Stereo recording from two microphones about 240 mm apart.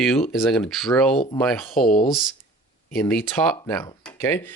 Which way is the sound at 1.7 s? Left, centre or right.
Left.